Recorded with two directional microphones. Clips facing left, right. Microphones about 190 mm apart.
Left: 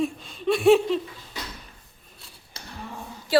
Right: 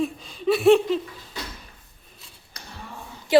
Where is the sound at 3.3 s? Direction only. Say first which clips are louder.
Right 4 dB; 20° right (ahead or behind).